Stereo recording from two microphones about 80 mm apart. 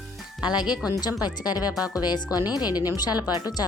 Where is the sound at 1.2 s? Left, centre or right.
Left.